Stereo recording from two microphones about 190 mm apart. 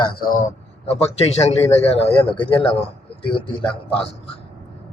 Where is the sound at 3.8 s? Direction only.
30° left (ahead or behind).